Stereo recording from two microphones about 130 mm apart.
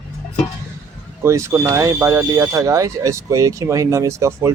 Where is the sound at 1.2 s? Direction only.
20° right (ahead or behind).